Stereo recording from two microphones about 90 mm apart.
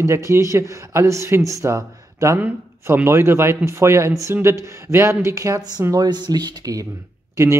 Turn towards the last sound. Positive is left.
turn(degrees=-30)  # may be behind; listen again after turning